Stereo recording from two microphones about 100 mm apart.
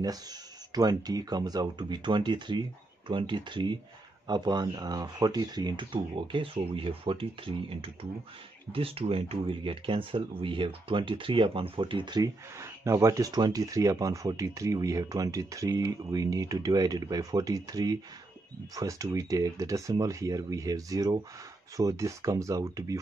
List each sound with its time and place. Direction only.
0.0 s speech: 40° right (ahead or behind)
12.2 s speech: 30° right (ahead or behind)